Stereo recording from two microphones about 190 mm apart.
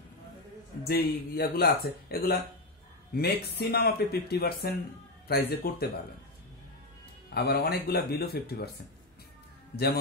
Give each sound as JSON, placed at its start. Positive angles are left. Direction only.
{"t": 0.8, "sound": "speech", "side_deg": 55}
{"t": 7.2, "sound": "speech", "side_deg": 55}